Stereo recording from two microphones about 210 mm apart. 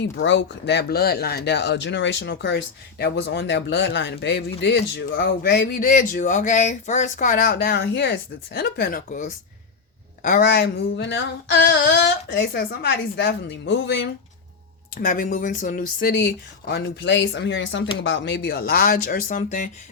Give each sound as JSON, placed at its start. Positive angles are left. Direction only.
{"t": 0.0, "sound": "speech", "side_deg": 60}
{"t": 15.0, "sound": "speech", "side_deg": 40}
{"t": 16.6, "sound": "speech", "side_deg": 55}